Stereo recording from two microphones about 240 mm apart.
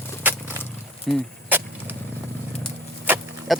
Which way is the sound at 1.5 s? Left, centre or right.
Centre.